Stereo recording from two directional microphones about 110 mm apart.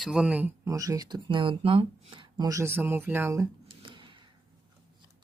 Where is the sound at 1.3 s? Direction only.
50° right (ahead or behind).